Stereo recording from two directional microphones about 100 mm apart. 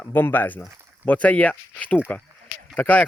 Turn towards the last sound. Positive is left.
turn(degrees=15)  # may be behind; listen again after turning